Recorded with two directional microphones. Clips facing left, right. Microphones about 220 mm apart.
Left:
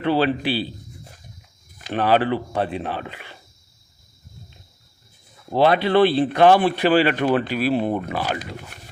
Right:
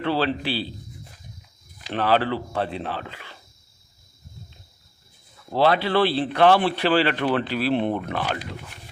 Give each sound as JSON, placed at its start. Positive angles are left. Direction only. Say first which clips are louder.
{"t": 0.0, "sound": "speech", "louder": "left 4 dB", "side_deg": 15}
{"t": 1.9, "sound": "speech", "louder": "left 3 dB", "side_deg": 15}
{"t": 5.5, "sound": "speech", "louder": "left 3 dB", "side_deg": 15}